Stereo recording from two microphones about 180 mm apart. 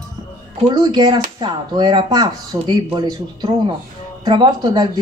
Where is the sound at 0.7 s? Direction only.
25° right (ahead or behind).